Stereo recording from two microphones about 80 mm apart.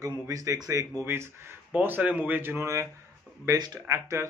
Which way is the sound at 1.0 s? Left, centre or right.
Right.